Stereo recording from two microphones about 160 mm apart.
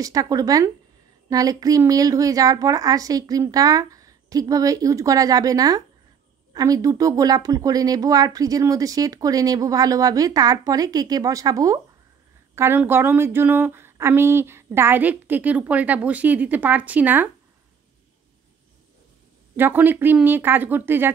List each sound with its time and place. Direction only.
0.0 s speech: 20° right (ahead or behind)
19.5 s speech: 10° right (ahead or behind)